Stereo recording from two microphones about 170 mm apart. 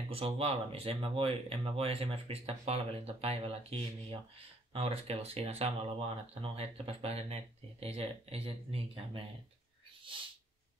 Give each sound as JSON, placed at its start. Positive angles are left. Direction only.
{"t": 0.1, "sound": "speech", "side_deg": -35}